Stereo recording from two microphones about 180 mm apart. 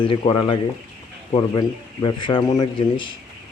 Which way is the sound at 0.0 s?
25° left (ahead or behind).